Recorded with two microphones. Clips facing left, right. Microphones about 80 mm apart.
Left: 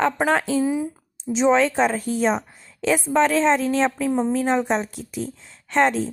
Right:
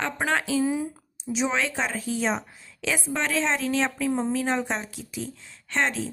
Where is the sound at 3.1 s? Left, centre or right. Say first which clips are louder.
Left 9 dB; left.